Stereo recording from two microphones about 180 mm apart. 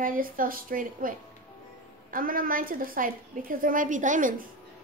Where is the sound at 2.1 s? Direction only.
50° right (ahead or behind).